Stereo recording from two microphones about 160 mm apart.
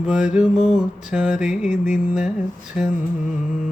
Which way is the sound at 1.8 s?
50° left (ahead or behind).